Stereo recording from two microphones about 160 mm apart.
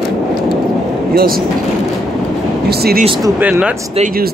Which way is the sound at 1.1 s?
70° right (ahead or behind).